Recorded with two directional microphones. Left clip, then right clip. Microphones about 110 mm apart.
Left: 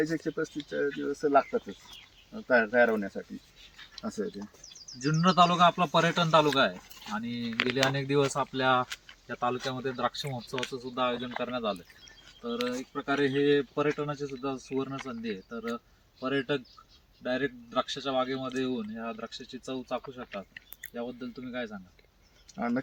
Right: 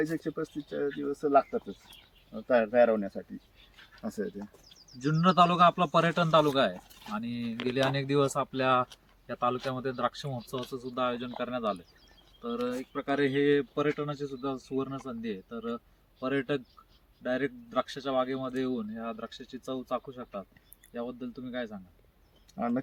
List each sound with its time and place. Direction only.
0.1 s speech: 25° right (ahead or behind)
2.5 s speech: 45° right (ahead or behind)
4.9 s speech: 20° right (ahead or behind)
12.9 s speech: 25° right (ahead or behind)
18.7 s speech: 5° right (ahead or behind)
19.0 s speech: 15° right (ahead or behind)